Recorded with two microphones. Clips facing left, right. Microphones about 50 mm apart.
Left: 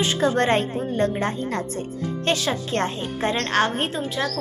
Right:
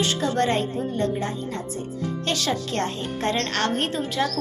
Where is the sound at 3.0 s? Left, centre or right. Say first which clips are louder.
Left 1 dB; centre.